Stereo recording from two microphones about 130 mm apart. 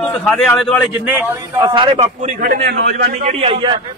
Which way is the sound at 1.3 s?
30° right (ahead or behind).